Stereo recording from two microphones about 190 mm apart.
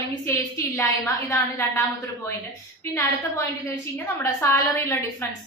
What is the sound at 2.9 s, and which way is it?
A woman's voice, 15° left (ahead or behind).